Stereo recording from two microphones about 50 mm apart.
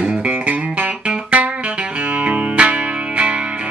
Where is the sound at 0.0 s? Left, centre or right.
Right.